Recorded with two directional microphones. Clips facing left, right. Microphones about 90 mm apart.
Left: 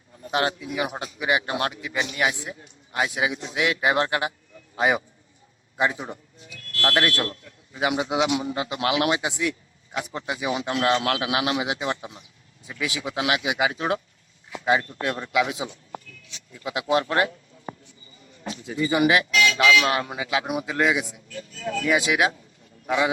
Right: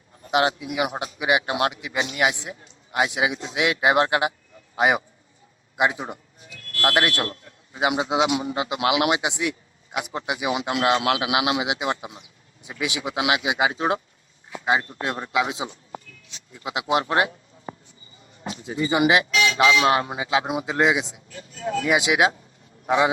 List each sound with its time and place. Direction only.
0.3 s a man's voice: 20° right (ahead or behind)
6.0 s music: 30° right (ahead or behind)
6.8 s a man's voice: 20° right (ahead or behind)
18.5 s a man's voice: 30° right (ahead or behind)